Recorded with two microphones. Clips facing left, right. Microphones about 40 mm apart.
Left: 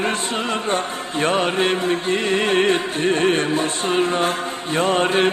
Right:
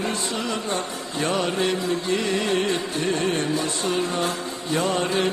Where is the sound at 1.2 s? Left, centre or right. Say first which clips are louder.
Left 4 dB; left.